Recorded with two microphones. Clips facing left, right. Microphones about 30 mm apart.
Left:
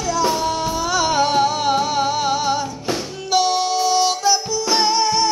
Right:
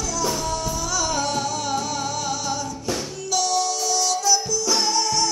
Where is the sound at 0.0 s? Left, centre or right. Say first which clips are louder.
Left 6 dB; left.